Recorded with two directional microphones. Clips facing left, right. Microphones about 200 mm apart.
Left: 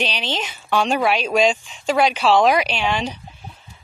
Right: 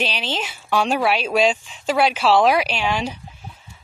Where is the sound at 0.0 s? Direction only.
5° right (ahead or behind).